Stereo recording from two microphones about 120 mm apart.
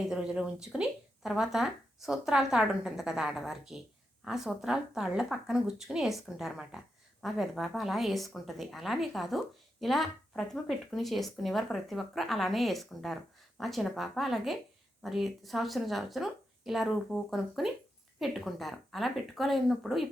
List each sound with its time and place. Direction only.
0.1 s speech: 5° right (ahead or behind)